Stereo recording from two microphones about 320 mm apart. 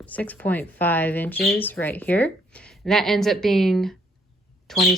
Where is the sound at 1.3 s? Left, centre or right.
Left.